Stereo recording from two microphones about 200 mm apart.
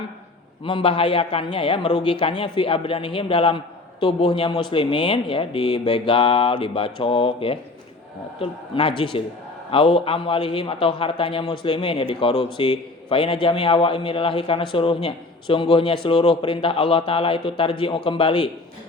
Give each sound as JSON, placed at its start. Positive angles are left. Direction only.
{"t": 0.6, "sound": "a man's voice", "side_deg": 25}